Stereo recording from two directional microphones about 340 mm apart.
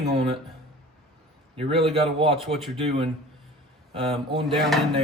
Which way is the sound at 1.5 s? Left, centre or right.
Centre.